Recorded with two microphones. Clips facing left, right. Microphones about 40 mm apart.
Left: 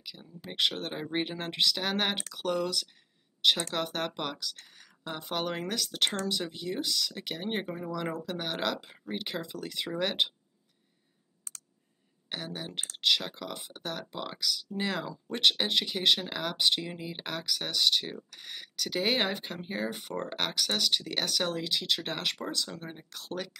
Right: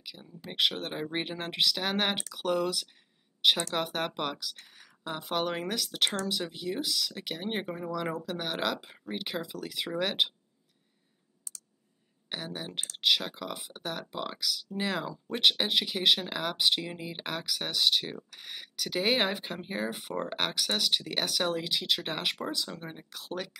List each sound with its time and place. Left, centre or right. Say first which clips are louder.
0.0 s speech: even; centre
11.5 s a sound: left 1 dB; left
12.3 s speech: even; centre